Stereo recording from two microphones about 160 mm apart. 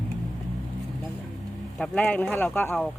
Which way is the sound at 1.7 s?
5° left (ahead or behind).